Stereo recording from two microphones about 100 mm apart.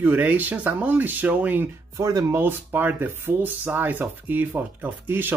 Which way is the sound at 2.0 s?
35° right (ahead or behind).